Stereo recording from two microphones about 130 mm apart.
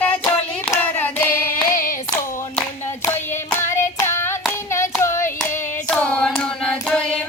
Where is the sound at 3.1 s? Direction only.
15° left (ahead or behind).